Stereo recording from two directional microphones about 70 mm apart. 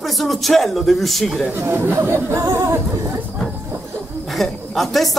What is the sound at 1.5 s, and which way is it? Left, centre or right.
Speech, right.